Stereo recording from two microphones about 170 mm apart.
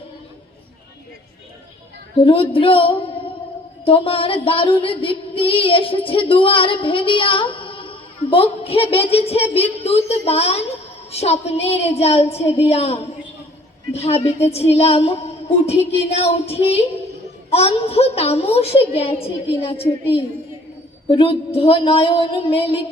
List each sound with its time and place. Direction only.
2.2 s female singing: 30° left (ahead or behind)
14.7 s child singing: 35° left (ahead or behind)
16.0 s female singing: 40° left (ahead or behind)
21.2 s female singing: 35° left (ahead or behind)